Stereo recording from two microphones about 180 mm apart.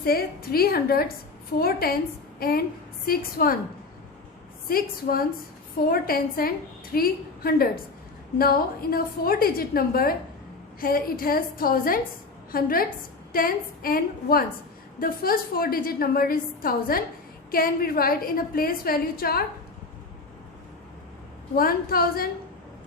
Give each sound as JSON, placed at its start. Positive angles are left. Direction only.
{"t": 0.0, "sound": "a woman's voice", "side_deg": 55}
{"t": 4.7, "sound": "a woman's voice", "side_deg": 55}
{"t": 21.5, "sound": "a woman's voice", "side_deg": 55}